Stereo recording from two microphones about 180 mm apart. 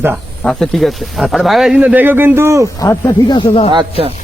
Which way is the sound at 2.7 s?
20° left (ahead or behind).